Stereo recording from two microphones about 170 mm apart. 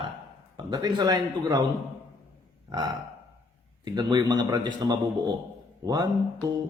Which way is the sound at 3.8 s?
25° right (ahead or behind).